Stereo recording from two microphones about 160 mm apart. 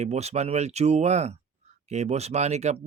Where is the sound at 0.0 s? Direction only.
45° right (ahead or behind).